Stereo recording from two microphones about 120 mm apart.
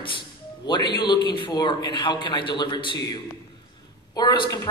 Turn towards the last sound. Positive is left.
turn(degrees=35)  # may be behind; listen again after turning